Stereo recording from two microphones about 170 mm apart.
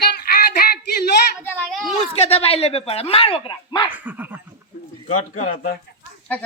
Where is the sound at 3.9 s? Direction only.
10° right (ahead or behind).